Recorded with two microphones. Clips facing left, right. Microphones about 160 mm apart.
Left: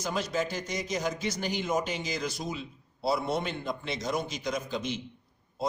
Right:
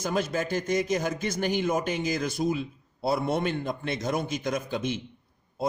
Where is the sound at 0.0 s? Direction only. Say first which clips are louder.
Right 3 dB; 50° right (ahead or behind).